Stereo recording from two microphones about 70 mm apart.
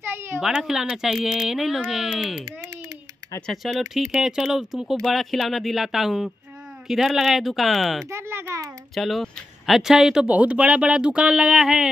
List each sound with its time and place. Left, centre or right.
0.1 s a sound: right
0.6 s speech: centre
3.9 s speech: centre
8.1 s a sound: right
8.9 s speech: centre
10.2 s speech: centre